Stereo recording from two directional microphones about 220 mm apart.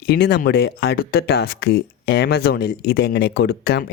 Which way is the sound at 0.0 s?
50° left (ahead or behind).